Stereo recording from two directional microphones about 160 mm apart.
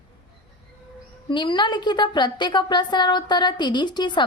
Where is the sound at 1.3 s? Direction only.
30° left (ahead or behind).